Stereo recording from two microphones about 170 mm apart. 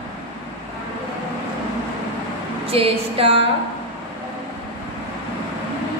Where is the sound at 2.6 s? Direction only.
35° right (ahead or behind).